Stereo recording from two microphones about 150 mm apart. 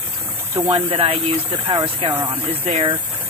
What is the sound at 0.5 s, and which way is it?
Speech, 35° right (ahead or behind).